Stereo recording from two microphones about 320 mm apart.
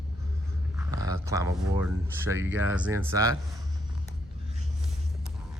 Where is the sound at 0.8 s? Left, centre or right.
Centre.